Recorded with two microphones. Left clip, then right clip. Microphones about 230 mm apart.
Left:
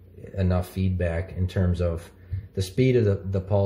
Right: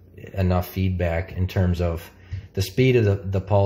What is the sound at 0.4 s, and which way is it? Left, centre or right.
Speech, right.